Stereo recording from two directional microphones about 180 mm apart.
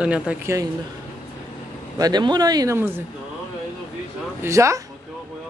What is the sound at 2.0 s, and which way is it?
Speech, 20° right (ahead or behind).